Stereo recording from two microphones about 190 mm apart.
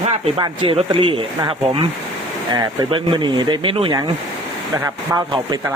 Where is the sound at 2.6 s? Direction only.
25° right (ahead or behind).